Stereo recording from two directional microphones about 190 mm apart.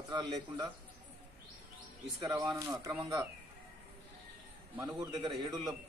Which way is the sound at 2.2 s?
20° right (ahead or behind).